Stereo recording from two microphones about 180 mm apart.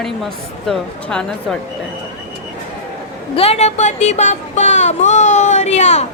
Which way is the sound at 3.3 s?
35° left (ahead or behind).